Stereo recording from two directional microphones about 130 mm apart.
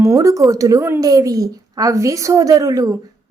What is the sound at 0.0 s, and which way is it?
A woman's voice, 25° right (ahead or behind).